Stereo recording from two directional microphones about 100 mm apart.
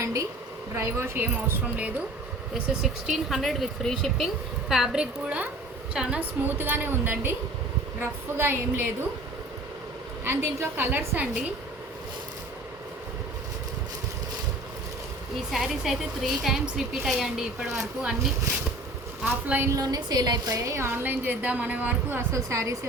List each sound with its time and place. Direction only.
0.0 s a sound: 30° right (ahead or behind)
0.8 s a woman's voice: 25° right (ahead or behind)
2.6 s a woman's voice: 5° right (ahead or behind)
6.6 s a woman's voice: 20° right (ahead or behind)
10.2 s a woman's voice: 25° right (ahead or behind)
15.5 s a woman's voice: 5° right (ahead or behind)
19.2 s a woman's voice: 15° right (ahead or behind)
19.7 s a woman's voice: 40° right (ahead or behind)